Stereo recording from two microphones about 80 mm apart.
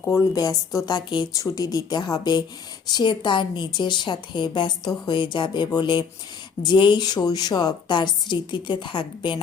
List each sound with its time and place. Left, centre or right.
0.3 s a woman's voice: left